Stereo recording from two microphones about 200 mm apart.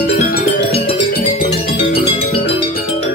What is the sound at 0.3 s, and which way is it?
Music, 50° left (ahead or behind).